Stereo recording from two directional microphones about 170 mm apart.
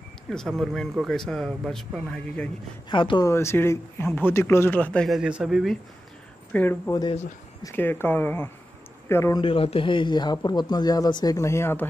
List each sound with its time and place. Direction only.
0.3 s speech: centre (ahead or behind)
2.9 s speech: 30° left (ahead or behind)
3.3 s speech: 15° left (ahead or behind); by 5.8 s centre (ahead or behind)
6.5 s speech: 10° left (ahead or behind)
9.4 s speech: 30° left (ahead or behind); by 11.9 s 15° left (ahead or behind)